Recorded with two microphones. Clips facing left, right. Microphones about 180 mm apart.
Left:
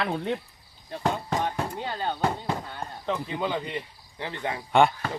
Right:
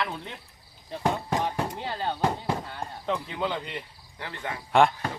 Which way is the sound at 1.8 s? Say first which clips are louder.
Left 1 dB; centre (ahead or behind).